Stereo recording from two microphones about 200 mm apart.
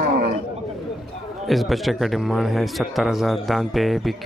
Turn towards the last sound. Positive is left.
turn(degrees=0)  # may be behind; listen again after turning